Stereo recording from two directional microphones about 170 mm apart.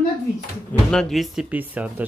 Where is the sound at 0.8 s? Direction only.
5° left (ahead or behind).